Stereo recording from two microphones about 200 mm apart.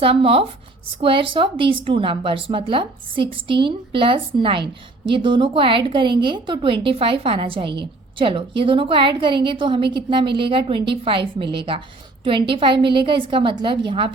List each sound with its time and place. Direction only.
0.0 s a woman's voice: 30° right (ahead or behind)